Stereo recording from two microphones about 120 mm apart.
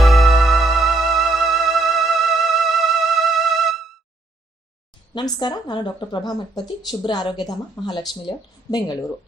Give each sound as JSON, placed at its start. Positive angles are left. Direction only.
{"t": 0.0, "sound": "music", "side_deg": 0}
{"t": 5.1, "sound": "speech", "side_deg": 40}